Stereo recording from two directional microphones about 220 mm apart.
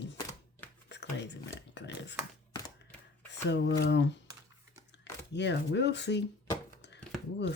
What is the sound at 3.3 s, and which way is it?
Speech, 50° left (ahead or behind).